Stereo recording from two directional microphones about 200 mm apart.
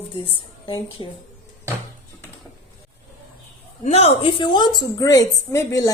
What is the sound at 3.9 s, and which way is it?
A woman's voice, 30° left (ahead or behind).